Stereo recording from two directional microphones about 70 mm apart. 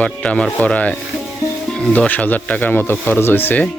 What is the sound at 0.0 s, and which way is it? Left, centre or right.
Speech, centre.